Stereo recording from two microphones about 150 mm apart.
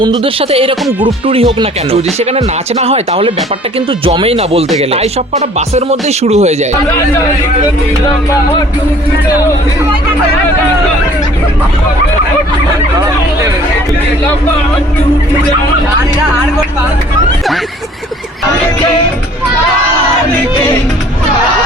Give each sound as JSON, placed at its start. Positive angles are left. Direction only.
{"t": 0.0, "sound": "speech", "side_deg": -35}